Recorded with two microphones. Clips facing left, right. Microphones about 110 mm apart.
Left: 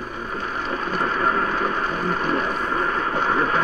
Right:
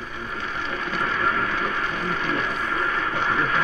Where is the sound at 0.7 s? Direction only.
35° left (ahead or behind).